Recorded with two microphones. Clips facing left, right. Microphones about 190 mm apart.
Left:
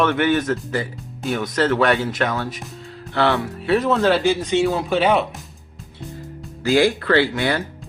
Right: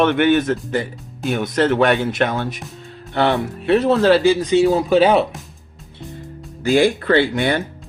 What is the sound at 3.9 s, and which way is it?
A man's voice, 35° right (ahead or behind).